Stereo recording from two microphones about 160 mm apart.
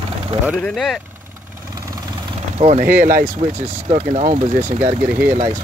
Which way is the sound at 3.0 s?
60° right (ahead or behind).